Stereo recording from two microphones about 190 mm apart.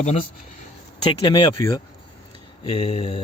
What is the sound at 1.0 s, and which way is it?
Speech, 25° left (ahead or behind).